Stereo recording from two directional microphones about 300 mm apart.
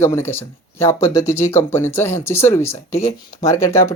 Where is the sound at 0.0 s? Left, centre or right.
Centre.